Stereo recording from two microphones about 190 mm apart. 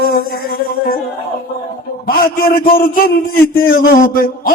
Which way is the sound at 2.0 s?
50° left (ahead or behind).